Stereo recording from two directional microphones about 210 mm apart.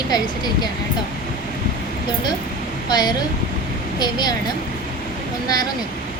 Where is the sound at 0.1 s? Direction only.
20° left (ahead or behind).